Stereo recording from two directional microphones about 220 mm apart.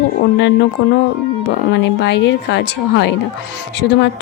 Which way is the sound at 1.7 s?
50° left (ahead or behind).